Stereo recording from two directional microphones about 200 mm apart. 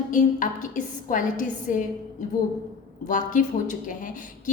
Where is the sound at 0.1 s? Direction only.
40° left (ahead or behind).